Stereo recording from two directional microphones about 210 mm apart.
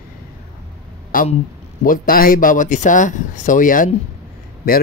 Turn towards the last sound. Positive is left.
turn(degrees=40)  # may be behind; listen again after turning